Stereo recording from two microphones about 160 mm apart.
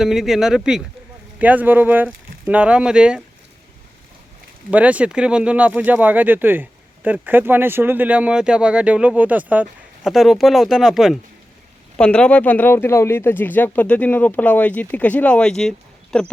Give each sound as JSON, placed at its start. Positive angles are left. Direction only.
{"t": 0.0, "sound": "speech", "side_deg": 0}
{"t": 4.7, "sound": "speech", "side_deg": -10}